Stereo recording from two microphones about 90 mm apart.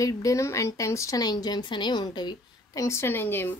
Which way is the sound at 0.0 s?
40° left (ahead or behind).